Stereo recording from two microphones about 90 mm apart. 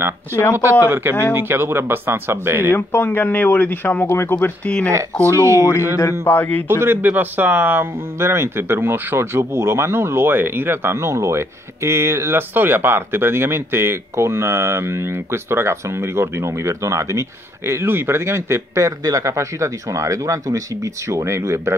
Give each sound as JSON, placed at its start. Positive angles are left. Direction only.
{"t": 0.3, "sound": "speech", "side_deg": 25}
{"t": 0.6, "sound": "speech", "side_deg": -25}
{"t": 2.7, "sound": "speech", "side_deg": 25}
{"t": 5.2, "sound": "speech", "side_deg": -30}
{"t": 6.2, "sound": "speech", "side_deg": 20}
{"t": 6.8, "sound": "speech", "side_deg": -25}